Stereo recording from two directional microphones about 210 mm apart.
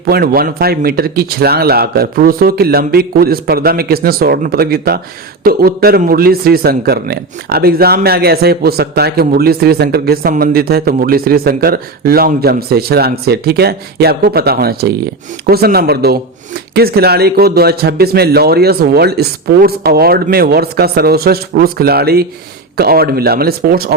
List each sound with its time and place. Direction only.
0.0 s speech: 45° right (ahead or behind)